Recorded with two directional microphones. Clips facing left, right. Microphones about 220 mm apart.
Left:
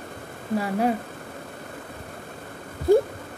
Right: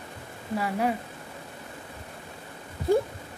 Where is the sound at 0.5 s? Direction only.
40° left (ahead or behind).